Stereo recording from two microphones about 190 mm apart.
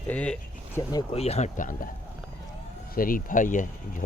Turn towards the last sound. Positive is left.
turn(degrees=45)  # may be behind; listen again after turning